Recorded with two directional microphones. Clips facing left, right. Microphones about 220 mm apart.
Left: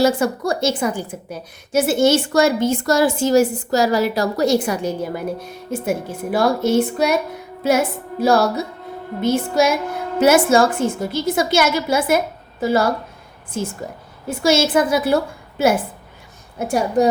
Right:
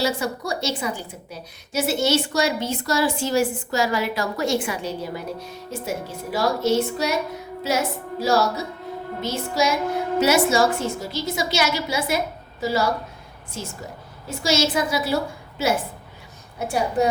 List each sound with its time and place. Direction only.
0.0 s a woman's voice: 50° left (ahead or behind)
14.3 s a woman's voice: 55° left (ahead or behind)